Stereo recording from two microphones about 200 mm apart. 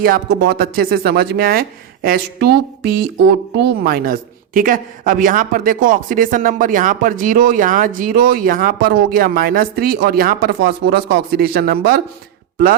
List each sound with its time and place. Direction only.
0.0 s speech: 50° right (ahead or behind)